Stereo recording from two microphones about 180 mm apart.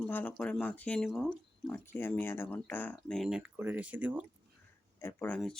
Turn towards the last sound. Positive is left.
turn(degrees=5)  # may be behind; listen again after turning